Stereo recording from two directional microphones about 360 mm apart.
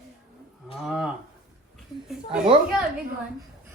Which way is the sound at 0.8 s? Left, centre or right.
Centre.